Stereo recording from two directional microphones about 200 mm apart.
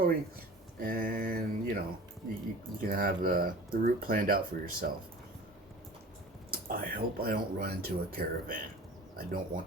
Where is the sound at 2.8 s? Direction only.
45° right (ahead or behind).